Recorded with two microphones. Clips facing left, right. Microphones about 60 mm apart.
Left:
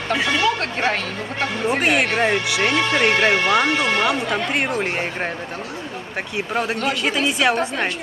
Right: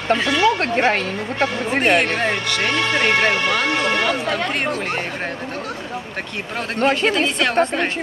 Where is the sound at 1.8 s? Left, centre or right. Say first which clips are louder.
Right 2 dB; centre.